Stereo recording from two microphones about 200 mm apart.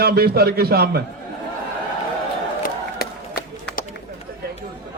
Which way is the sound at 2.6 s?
50° left (ahead or behind).